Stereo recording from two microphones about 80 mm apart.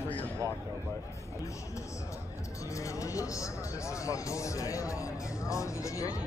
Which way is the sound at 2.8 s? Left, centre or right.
Left.